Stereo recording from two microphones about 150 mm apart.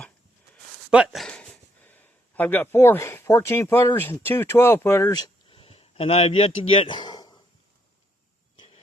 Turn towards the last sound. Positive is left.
turn(degrees=30)  # may be behind; listen again after turning